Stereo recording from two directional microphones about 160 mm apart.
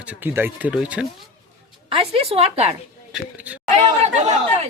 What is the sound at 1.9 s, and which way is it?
Speech, 35° right (ahead or behind).